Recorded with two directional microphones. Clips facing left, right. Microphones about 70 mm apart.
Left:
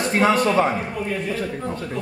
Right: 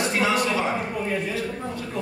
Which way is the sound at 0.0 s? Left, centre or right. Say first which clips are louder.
Left 4 dB; left.